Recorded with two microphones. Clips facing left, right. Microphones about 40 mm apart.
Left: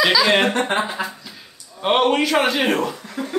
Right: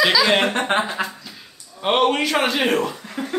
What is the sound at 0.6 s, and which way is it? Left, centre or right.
Speech, right.